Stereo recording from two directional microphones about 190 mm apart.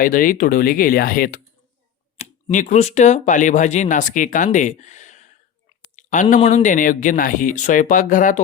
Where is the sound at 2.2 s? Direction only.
40° left (ahead or behind).